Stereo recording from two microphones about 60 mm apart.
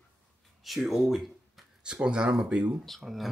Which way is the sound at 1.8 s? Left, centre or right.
Centre.